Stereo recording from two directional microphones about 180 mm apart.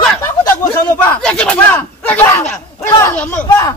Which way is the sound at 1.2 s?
5° left (ahead or behind).